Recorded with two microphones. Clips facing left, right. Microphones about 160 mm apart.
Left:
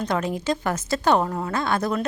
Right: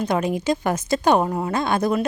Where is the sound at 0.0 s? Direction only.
15° right (ahead or behind).